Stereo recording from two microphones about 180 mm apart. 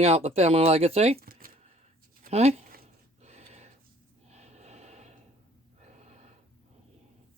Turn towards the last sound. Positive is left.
turn(degrees=-35)  # may be behind; listen again after turning